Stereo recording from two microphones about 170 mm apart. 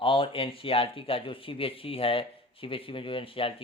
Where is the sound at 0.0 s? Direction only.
30° left (ahead or behind).